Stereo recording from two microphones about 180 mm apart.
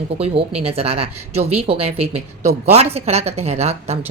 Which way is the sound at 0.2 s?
35° right (ahead or behind).